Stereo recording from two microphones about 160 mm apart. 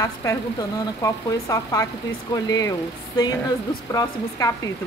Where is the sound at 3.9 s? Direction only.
20° left (ahead or behind).